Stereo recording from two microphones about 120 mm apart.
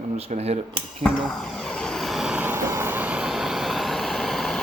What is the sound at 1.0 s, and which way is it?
Vehicle, centre (ahead or behind).